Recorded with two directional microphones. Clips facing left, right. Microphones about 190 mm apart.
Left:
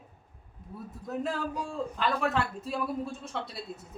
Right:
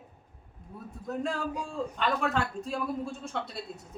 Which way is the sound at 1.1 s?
Centre (ahead or behind).